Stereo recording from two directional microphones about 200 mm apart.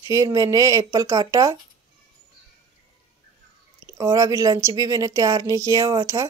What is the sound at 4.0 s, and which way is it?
Speech, 20° right (ahead or behind).